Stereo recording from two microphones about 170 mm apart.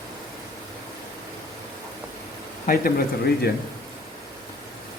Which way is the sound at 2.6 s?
60° left (ahead or behind).